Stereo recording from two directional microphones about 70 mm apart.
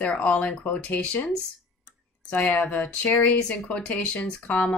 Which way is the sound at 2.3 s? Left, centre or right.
Left.